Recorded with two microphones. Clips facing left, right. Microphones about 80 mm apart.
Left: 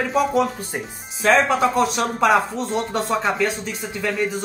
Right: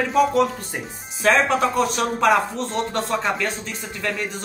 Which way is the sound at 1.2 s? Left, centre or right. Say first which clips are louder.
Left 1 dB; centre.